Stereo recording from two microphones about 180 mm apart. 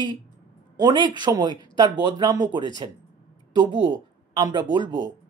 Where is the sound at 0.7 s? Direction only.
25° right (ahead or behind).